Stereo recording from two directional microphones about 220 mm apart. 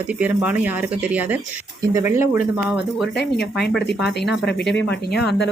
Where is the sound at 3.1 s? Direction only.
50° left (ahead or behind).